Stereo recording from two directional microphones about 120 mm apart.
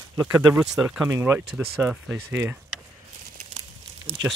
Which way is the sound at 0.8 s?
15° right (ahead or behind).